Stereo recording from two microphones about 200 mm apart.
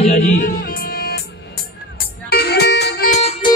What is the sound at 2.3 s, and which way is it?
Music, 50° left (ahead or behind).